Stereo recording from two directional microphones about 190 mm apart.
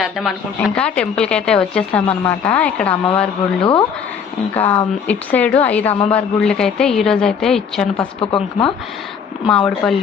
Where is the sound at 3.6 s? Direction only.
25° left (ahead or behind).